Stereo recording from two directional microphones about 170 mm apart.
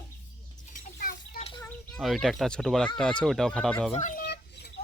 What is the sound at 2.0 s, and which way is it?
Speech, centre (ahead or behind).